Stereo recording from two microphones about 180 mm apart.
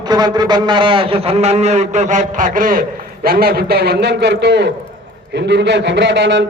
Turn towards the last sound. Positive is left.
turn(degrees=-75)  # may be behind; listen again after turning